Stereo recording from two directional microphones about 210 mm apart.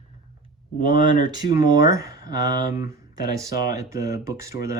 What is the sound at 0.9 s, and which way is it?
Speech, 20° right (ahead or behind).